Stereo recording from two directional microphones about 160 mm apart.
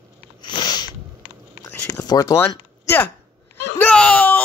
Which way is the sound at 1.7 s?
20° left (ahead or behind).